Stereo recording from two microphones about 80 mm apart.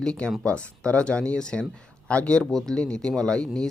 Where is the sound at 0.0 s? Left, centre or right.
Centre.